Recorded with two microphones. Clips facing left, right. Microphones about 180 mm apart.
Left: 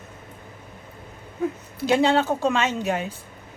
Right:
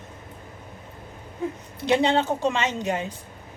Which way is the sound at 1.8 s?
20° right (ahead or behind).